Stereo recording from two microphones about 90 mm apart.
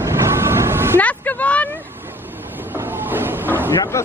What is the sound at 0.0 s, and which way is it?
Vehicle, 30° right (ahead or behind).